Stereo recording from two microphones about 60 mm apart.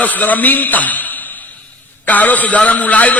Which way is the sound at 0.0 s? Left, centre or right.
Left.